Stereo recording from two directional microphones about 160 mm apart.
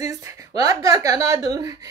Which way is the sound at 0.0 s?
20° right (ahead or behind).